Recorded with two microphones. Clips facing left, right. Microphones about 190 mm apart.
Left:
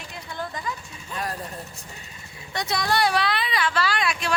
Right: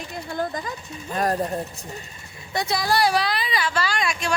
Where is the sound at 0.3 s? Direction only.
45° right (ahead or behind).